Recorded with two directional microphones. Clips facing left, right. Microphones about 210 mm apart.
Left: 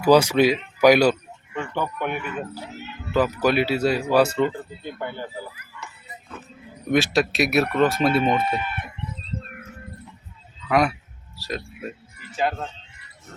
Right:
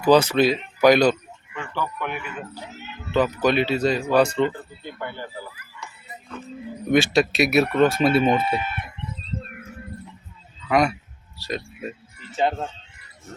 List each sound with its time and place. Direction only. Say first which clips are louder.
0.0 s speech: left 1 dB; 10° left (ahead or behind)
1.5 s a sound: left 2 dB; 20° left (ahead or behind)
3.1 s speech: even; 5° left (ahead or behind)
5.8 s music: right 1 dB; 5° left (ahead or behind)
6.9 s speech: right 2 dB; centre (ahead or behind)
10.7 s speech: even; centre (ahead or behind)
11.3 s a sound: right 1 dB; centre (ahead or behind)
12.3 s speech: right 2 dB; 25° right (ahead or behind)